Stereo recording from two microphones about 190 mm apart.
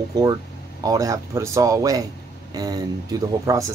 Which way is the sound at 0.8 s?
20° right (ahead or behind).